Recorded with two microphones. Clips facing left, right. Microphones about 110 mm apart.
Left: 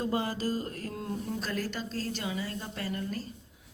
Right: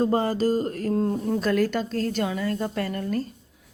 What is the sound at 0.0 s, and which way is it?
Speech, 40° right (ahead or behind).